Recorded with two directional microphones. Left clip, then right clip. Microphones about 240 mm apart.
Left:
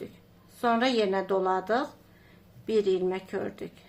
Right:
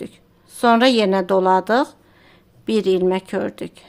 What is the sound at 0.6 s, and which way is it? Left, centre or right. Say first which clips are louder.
Speech: right 10 dB; right.